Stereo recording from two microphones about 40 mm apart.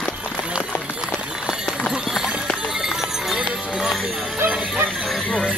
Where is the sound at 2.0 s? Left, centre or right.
Centre.